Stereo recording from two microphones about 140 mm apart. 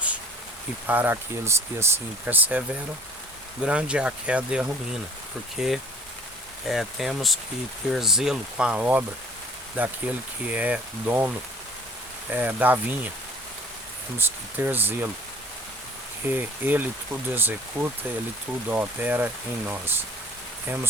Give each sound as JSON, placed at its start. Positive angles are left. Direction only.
{"t": 0.9, "sound": "speech", "side_deg": -15}
{"t": 12.3, "sound": "speech", "side_deg": -10}
{"t": 14.2, "sound": "speech", "side_deg": -15}
{"t": 16.2, "sound": "speech", "side_deg": -15}